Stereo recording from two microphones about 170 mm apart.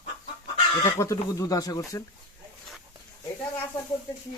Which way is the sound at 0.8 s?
20° left (ahead or behind).